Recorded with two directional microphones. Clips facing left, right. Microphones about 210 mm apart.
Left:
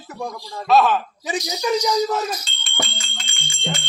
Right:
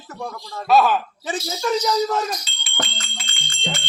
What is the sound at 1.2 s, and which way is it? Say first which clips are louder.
A man's voice: left 1 dB; 15° left (ahead or behind).